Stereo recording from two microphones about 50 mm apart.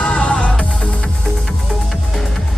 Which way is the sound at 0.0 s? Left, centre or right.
Centre.